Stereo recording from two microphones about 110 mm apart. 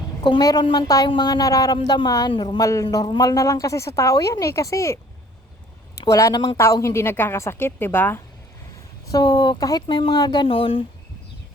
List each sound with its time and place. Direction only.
0.2 s speech: 40° left (ahead or behind)
2.6 s speech: 30° left (ahead or behind)
6.0 s speech: 30° left (ahead or behind)
9.1 s speech: 35° left (ahead or behind); by 10.8 s 55° left (ahead or behind)